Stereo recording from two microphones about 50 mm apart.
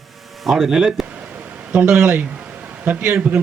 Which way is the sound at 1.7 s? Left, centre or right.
Right.